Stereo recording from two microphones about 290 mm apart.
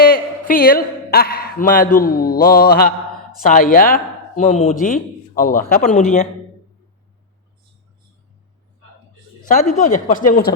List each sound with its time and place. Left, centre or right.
0.0 s a man's voice: left
9.5 s speech: left